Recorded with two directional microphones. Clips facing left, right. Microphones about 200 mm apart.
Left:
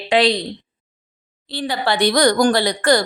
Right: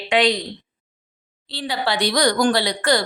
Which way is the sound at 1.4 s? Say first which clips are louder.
Left 3 dB; 50° left (ahead or behind).